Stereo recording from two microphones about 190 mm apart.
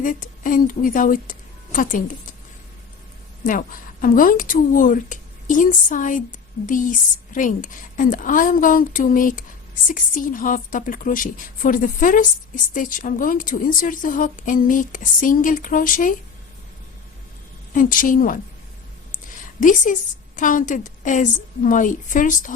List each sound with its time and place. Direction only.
0.0 s a woman's voice: 45° left (ahead or behind)
3.4 s a woman's voice: 45° left (ahead or behind)
17.7 s a woman's voice: 45° left (ahead or behind)